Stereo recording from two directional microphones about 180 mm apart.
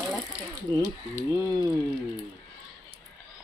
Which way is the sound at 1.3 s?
20° right (ahead or behind).